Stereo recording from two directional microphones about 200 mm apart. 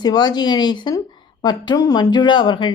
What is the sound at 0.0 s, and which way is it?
A woman's voice, 20° left (ahead or behind).